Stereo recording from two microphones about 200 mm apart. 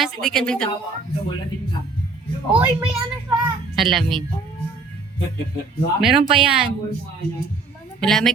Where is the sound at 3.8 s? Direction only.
Centre (ahead or behind).